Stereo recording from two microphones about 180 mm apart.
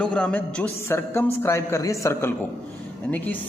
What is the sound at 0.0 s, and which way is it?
A man's voice, 5° left (ahead or behind).